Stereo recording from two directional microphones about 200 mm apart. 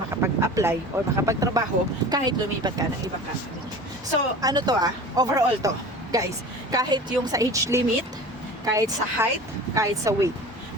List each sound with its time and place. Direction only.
0.2 s speech: 15° right (ahead or behind)
4.4 s speech: 20° right (ahead or behind)